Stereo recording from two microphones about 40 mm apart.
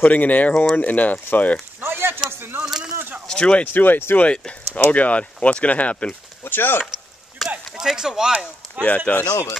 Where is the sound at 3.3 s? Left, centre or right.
Left.